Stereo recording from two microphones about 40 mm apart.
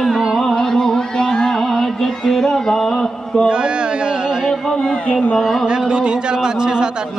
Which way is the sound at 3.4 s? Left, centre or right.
Right.